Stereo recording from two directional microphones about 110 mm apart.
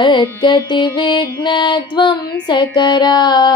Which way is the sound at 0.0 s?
45° left (ahead or behind).